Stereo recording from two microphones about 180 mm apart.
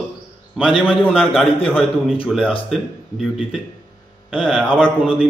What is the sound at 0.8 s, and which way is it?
A woman's voice, 5° left (ahead or behind).